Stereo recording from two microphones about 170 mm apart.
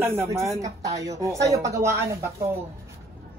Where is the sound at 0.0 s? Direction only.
15° right (ahead or behind).